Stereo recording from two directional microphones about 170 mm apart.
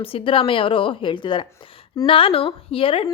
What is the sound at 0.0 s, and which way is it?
A woman's voice, 30° left (ahead or behind).